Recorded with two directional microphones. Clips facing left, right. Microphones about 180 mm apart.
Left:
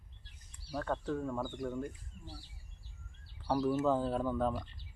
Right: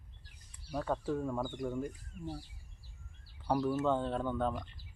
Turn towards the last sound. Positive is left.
turn(degrees=0)  # may be behind; listen again after turning